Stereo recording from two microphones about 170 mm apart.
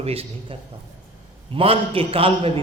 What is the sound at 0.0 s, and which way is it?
Speech, 35° right (ahead or behind).